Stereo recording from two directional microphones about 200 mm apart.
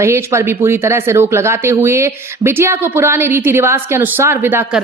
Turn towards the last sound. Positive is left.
turn(degrees=-10)  # may be behind; listen again after turning